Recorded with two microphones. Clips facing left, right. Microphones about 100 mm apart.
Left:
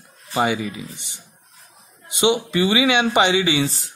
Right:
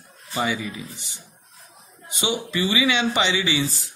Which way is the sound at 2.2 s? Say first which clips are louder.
Left 7 dB; 60° left (ahead or behind).